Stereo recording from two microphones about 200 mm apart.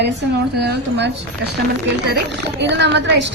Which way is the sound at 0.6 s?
55° right (ahead or behind).